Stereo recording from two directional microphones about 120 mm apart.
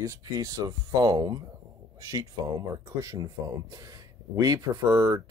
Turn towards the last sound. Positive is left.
turn(degrees=-25)  # may be behind; listen again after turning